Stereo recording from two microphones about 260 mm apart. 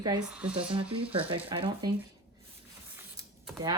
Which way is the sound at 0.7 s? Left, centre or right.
Centre.